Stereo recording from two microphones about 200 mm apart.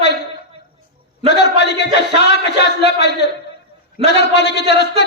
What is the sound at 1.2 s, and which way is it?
Speech, 60° left (ahead or behind).